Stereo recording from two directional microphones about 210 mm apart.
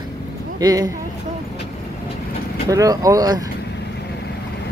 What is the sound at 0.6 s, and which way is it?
Speech, 20° right (ahead or behind).